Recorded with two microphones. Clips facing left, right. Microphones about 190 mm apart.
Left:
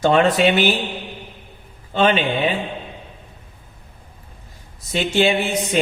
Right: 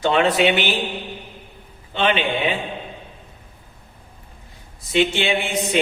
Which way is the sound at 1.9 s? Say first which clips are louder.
Left 3 dB; 45° left (ahead or behind).